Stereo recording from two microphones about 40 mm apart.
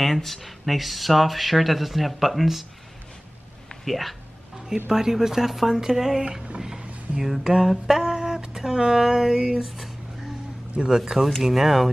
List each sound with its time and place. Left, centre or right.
0.0 s speech: centre
3.8 s speech: centre
4.8 s speech: centre
6.6 s music: centre
7.4 s speech: centre
7.8 s a sound: centre
10.7 s speech: right
11.0 s speech: centre